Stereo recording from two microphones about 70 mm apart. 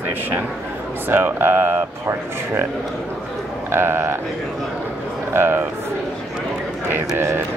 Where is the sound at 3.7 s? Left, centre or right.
Right.